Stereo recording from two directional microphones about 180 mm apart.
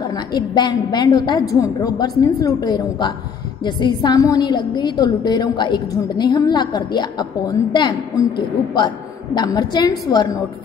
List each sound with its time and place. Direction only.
0.1 s a woman's voice: 25° left (ahead or behind)